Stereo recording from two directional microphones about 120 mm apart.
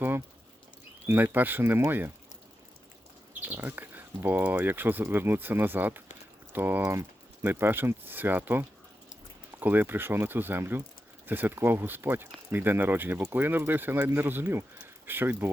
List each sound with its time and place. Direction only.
1.0 s speech: 20° right (ahead or behind)
3.4 s speech: 15° right (ahead or behind)